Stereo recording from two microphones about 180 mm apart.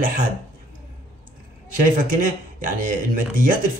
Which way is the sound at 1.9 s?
50° right (ahead or behind).